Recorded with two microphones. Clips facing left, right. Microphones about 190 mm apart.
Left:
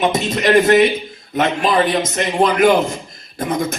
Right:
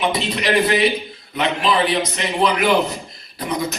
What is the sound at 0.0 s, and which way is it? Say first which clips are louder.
A man's voice: left 4 dB; 45° left (ahead or behind).